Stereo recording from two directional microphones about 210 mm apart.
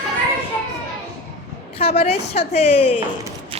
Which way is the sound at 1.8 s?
30° left (ahead or behind).